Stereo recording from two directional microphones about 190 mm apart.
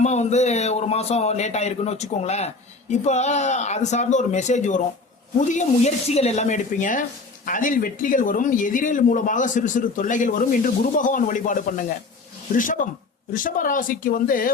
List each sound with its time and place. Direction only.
0.0 s a man's voice: 35° left (ahead or behind)